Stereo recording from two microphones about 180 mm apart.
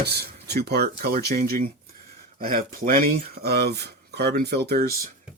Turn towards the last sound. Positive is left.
turn(degrees=-60)  # may be behind; listen again after turning